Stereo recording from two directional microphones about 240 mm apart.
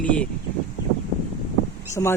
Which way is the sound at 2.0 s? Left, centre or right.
Centre.